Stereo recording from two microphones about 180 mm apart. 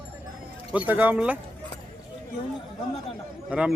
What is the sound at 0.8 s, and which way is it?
Speech, 10° right (ahead or behind).